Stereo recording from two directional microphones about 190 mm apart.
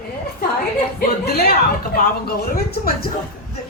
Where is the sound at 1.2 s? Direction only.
55° left (ahead or behind).